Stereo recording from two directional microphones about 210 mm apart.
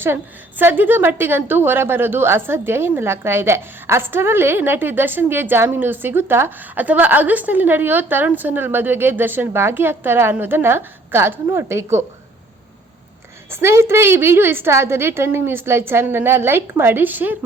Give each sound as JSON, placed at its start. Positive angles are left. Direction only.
{"t": 0.6, "sound": "a woman's voice", "side_deg": -10}
{"t": 13.5, "sound": "a woman's voice", "side_deg": -10}